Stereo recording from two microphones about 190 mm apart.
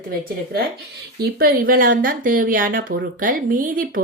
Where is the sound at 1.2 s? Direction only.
50° right (ahead or behind).